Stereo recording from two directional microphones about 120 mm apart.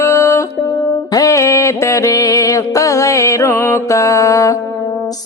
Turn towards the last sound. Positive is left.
turn(degrees=25)  # may be behind; listen again after turning